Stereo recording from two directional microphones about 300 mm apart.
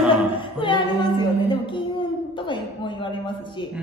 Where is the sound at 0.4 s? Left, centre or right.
Centre.